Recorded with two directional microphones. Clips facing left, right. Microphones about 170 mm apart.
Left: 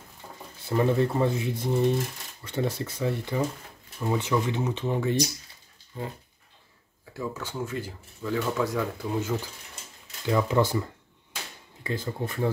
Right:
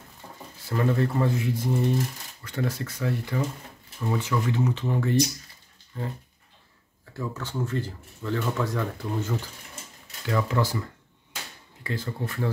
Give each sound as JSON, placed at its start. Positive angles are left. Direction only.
{"t": 0.7, "sound": "speech", "side_deg": 20}
{"t": 7.2, "sound": "speech", "side_deg": 10}
{"t": 10.2, "sound": "speech", "side_deg": 20}